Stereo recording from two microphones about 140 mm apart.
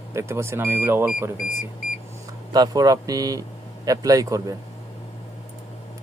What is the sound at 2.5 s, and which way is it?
Speech, 25° right (ahead or behind).